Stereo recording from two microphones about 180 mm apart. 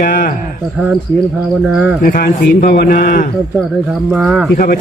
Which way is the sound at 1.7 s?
5° right (ahead or behind).